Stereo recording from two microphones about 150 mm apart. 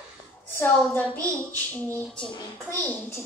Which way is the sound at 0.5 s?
10° left (ahead or behind).